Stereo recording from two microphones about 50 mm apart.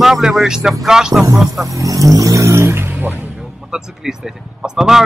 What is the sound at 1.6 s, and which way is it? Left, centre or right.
Vehicle, right.